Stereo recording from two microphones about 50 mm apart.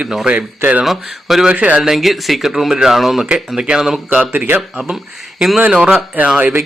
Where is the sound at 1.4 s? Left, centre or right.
Right.